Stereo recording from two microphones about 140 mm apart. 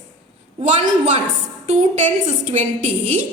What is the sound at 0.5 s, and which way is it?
A woman's voice, 55° right (ahead or behind).